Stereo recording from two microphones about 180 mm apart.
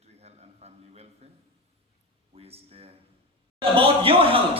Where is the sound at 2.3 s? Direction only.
35° right (ahead or behind).